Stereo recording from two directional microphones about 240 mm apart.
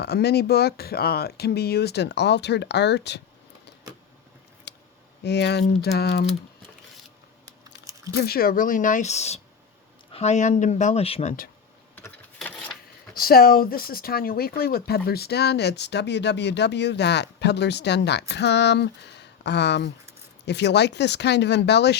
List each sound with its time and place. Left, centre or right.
0.0 s speech: left
4.7 s a sound: left
5.2 s speech: left
8.1 s speech: left
11.9 s vehicle: centre
13.1 s speech: left